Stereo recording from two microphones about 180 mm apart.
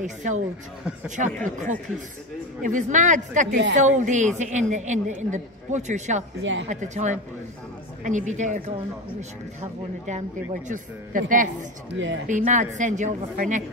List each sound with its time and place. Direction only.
0.0 s a woman's voice: 40° right (ahead or behind)
6.4 s speech: 90° right
6.7 s a woman's voice: 40° right (ahead or behind)
11.9 s speech: 85° right
12.3 s a woman's voice: 45° right (ahead or behind)